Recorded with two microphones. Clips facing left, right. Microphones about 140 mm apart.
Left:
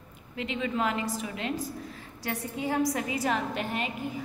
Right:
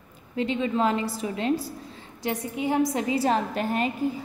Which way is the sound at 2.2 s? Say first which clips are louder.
Right 5 dB; 20° right (ahead or behind).